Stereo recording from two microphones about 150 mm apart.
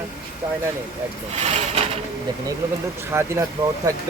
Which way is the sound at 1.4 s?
45° right (ahead or behind).